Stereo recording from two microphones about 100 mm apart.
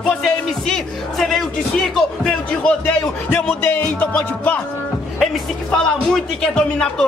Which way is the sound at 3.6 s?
20° left (ahead or behind).